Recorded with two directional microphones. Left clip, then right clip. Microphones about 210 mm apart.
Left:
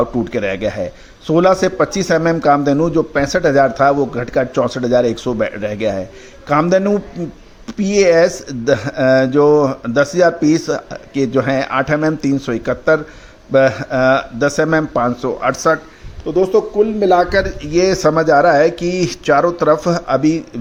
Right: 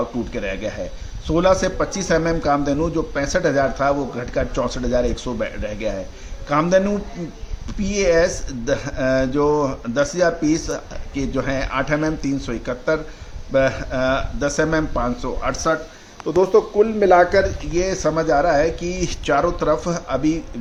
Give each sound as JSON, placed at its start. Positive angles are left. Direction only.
{"t": 0.3, "sound": "speech", "side_deg": 30}